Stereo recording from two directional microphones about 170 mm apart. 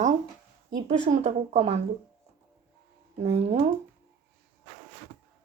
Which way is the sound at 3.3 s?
40° right (ahead or behind).